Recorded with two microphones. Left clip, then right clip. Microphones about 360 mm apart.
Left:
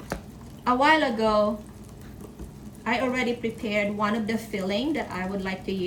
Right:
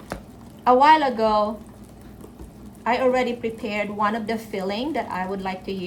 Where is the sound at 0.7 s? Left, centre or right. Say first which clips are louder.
Right 6 dB; centre.